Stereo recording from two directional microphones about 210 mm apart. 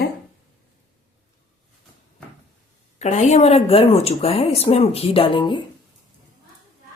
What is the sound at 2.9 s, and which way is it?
A woman's voice, 35° left (ahead or behind).